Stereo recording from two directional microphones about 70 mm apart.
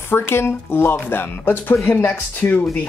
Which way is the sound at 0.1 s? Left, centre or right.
Left.